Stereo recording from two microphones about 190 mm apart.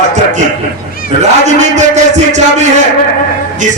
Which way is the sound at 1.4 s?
40° right (ahead or behind).